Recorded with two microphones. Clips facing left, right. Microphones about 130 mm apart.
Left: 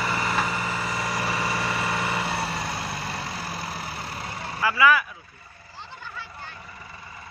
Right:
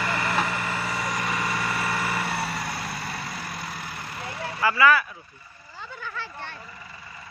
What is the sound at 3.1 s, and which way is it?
Vehicle, 30° left (ahead or behind).